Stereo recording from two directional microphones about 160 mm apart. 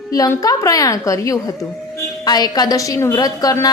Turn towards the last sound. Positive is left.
turn(degrees=20)  # may be behind; listen again after turning